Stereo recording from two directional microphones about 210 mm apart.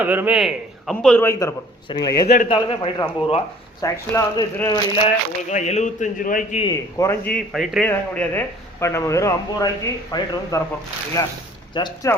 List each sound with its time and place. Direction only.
0.0 s a man's voice: 10° right (ahead or behind)
1.2 s a man's voice: 15° left (ahead or behind)
4.9 s speech: 30° left (ahead or behind)
6.6 s a man's voice: 15° left (ahead or behind)
11.7 s a man's voice: 20° left (ahead or behind)